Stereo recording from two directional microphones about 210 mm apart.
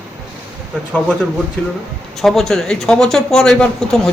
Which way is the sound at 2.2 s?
Centre (ahead or behind).